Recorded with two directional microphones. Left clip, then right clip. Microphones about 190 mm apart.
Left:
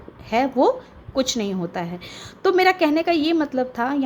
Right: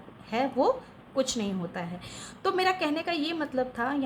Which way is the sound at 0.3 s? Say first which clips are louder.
Left 7 dB; 35° left (ahead or behind).